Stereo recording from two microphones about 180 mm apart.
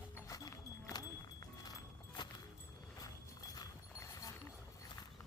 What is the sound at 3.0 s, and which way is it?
Clip-clop, 20° left (ahead or behind).